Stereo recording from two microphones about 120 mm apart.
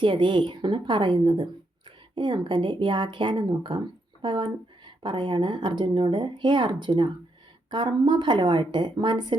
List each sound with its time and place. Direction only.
0.0 s speech: 40° right (ahead or behind)